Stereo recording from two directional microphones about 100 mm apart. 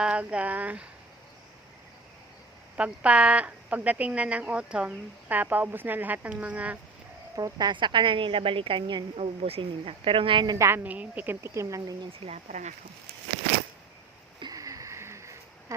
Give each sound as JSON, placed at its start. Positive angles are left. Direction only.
{"t": 0.0, "sound": "speech", "side_deg": -10}
{"t": 2.7, "sound": "speech", "side_deg": -10}
{"t": 7.3, "sound": "speech", "side_deg": -35}
{"t": 7.7, "sound": "a woman's voice", "side_deg": -50}
{"t": 9.1, "sound": "a woman's voice", "side_deg": -75}
{"t": 10.4, "sound": "speech", "side_deg": -40}
{"t": 10.7, "sound": "a woman's voice", "side_deg": -15}
{"t": 12.2, "sound": "a woman's voice", "side_deg": -60}
{"t": 14.5, "sound": "a sound", "side_deg": -35}